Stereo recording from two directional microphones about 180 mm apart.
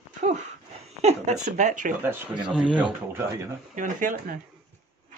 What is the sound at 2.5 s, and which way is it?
Speech, 5° right (ahead or behind).